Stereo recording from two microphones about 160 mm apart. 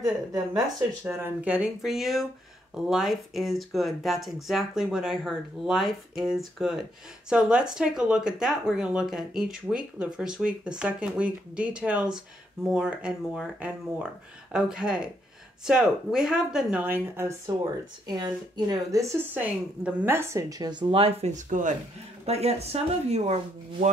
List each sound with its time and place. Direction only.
0.0 s a woman's voice: 20° right (ahead or behind); by 21.7 s 50° right (ahead or behind)
22.2 s speech: 40° right (ahead or behind)